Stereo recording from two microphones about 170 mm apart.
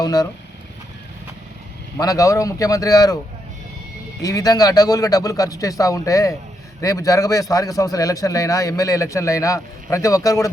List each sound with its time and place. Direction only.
0.0 s a man's voice: 20° left (ahead or behind)
2.0 s a man's voice: 20° left (ahead or behind)
4.2 s a man's voice: 20° left (ahead or behind)